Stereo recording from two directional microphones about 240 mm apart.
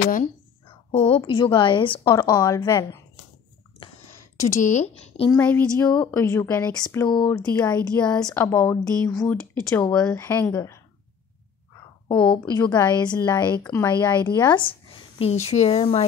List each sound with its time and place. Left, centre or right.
0.9 s a woman's voice: left
4.6 s a woman's voice: left
5.4 s a woman's voice: centre
12.1 s a woman's voice: left
14.5 s a woman's voice: left